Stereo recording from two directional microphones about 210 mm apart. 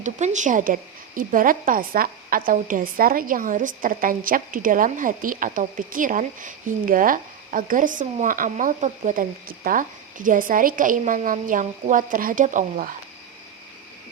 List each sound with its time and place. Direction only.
0.0 s a woman's voice: 35° right (ahead or behind)